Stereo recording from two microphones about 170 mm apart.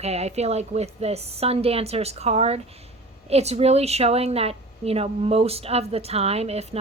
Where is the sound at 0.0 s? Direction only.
40° right (ahead or behind).